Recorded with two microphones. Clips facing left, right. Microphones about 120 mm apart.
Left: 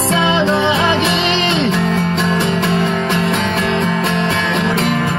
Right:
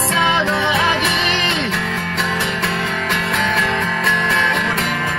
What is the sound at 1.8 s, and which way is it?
Music, 35° left (ahead or behind).